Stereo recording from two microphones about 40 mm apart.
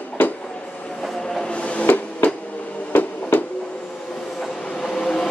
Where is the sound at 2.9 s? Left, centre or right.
Left.